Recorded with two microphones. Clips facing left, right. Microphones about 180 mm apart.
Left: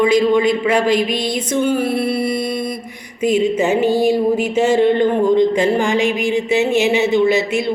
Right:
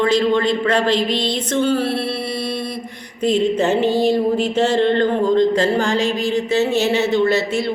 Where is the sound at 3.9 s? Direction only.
10° left (ahead or behind).